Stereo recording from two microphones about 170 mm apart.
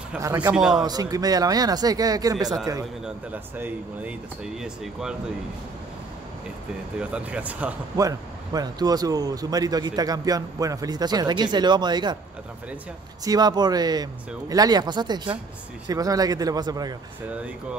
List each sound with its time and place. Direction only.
0.2 s speech: 20° right (ahead or behind)
0.5 s a man's voice: 5° right (ahead or behind)
0.8 s speech: 20° right (ahead or behind)
3.5 s speech: 10° right (ahead or behind)
7.0 s speech: 5° right (ahead or behind)
7.9 s speech: 20° right (ahead or behind)
13.2 s speech: 20° right (ahead or behind)